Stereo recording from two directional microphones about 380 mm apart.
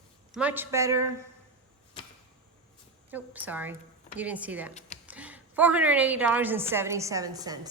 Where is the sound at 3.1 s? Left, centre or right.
Centre.